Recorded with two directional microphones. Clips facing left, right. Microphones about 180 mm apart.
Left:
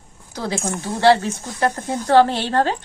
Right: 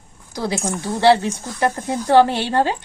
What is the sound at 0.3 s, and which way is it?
A woman's voice, 15° right (ahead or behind).